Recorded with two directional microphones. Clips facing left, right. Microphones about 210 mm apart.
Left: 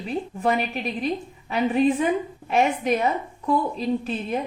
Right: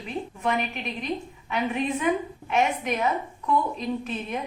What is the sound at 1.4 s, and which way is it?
A woman's voice, 35° left (ahead or behind).